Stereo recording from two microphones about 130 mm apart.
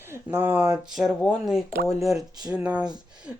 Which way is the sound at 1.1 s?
10° left (ahead or behind).